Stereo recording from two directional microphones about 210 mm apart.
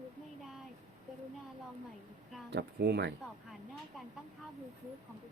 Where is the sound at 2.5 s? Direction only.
50° right (ahead or behind).